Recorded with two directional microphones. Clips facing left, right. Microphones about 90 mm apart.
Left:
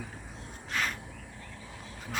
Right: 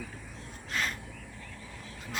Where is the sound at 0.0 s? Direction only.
25° left (ahead or behind).